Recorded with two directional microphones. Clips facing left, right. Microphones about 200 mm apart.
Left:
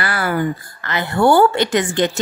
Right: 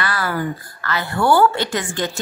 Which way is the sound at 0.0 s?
25° left (ahead or behind).